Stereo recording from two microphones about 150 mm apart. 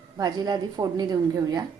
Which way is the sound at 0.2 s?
25° right (ahead or behind).